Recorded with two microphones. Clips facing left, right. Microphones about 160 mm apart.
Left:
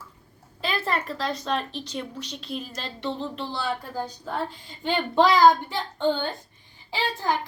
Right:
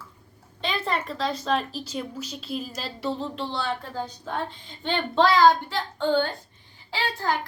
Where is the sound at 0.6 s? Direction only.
Centre (ahead or behind).